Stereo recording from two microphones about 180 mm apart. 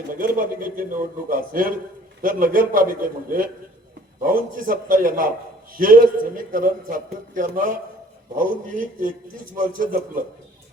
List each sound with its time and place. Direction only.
0.2 s a man's voice: 50° right (ahead or behind)